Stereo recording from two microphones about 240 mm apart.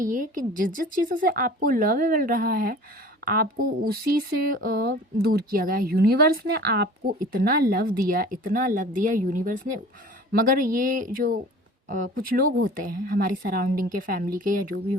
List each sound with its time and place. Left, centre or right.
0.0 s a woman's voice: right